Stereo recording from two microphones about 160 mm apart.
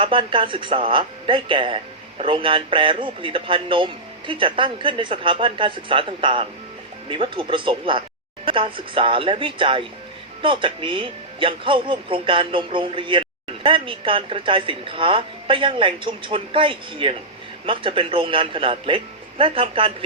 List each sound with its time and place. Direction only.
0.0 s speech: 35° right (ahead or behind)